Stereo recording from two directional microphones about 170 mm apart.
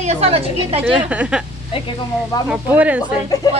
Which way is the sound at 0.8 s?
5° right (ahead or behind).